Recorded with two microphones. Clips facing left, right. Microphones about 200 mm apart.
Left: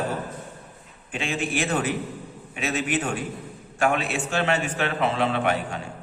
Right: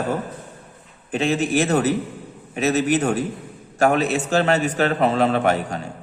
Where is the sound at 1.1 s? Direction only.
40° right (ahead or behind).